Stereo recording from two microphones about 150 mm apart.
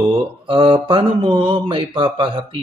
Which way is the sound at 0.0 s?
35° right (ahead or behind).